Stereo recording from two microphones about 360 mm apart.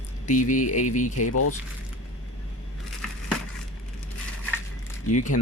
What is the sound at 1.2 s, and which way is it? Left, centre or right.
Speech, left.